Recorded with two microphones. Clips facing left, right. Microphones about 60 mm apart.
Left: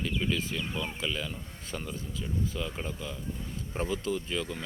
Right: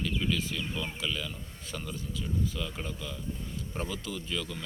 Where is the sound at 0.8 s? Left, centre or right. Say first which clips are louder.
Left 1 dB; centre.